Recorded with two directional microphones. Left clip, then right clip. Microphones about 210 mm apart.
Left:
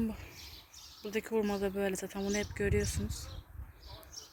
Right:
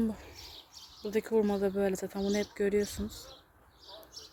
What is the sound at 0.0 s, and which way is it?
Bird, 15° right (ahead or behind).